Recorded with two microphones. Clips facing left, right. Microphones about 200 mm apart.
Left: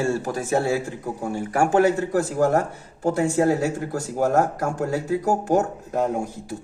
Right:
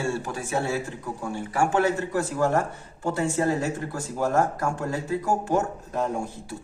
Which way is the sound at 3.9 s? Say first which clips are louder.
Left 4 dB; 45° left (ahead or behind).